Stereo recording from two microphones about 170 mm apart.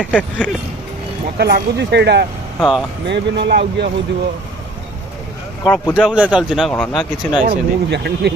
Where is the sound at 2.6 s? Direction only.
Centre (ahead or behind).